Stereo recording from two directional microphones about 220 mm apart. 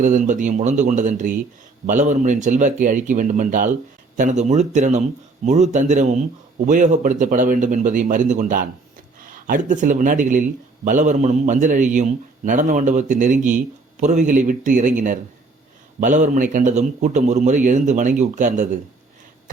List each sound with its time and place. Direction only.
0.0 s a man's voice: 35° right (ahead or behind)